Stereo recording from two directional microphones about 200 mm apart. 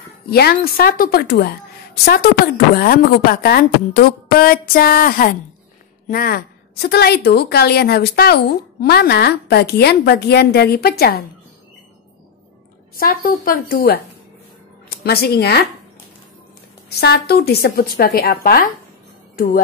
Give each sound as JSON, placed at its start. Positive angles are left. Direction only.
{"t": 0.3, "sound": "a woman's voice", "side_deg": 50}
{"t": 12.9, "sound": "a woman's voice", "side_deg": 50}
{"t": 17.0, "sound": "a woman's voice", "side_deg": 55}